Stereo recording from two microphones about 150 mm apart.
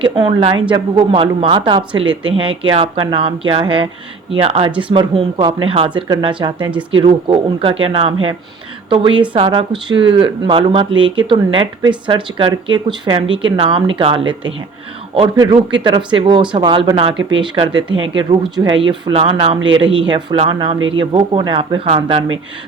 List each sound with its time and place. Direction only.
0.0 s speech: 35° right (ahead or behind)